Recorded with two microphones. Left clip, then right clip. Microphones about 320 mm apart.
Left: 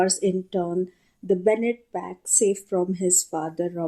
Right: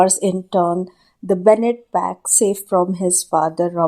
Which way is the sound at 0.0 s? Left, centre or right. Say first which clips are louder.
Right 7 dB; right.